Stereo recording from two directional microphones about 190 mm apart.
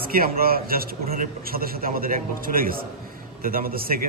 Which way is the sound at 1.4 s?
50° right (ahead or behind).